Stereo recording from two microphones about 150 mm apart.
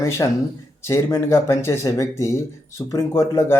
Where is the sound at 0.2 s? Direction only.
20° left (ahead or behind).